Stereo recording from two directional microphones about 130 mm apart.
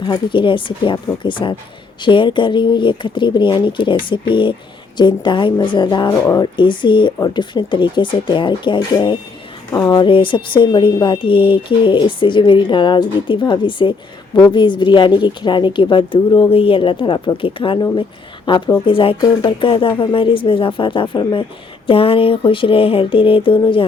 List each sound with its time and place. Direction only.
0.0 s speech: 35° left (ahead or behind)
6.2 s speech: 25° left (ahead or behind)
6.6 s speech: 40° left (ahead or behind)
21.8 s a sound: 45° left (ahead or behind)